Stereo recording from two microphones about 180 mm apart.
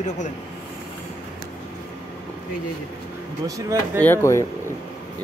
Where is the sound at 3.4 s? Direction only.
15° right (ahead or behind).